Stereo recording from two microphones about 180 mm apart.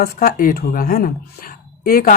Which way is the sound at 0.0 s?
55° left (ahead or behind).